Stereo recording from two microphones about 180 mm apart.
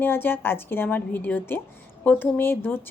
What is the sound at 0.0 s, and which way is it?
A woman's voice, 10° left (ahead or behind).